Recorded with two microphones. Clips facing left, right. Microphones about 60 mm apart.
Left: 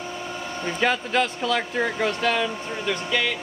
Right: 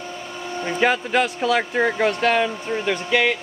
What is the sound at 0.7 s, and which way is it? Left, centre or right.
Speech, centre.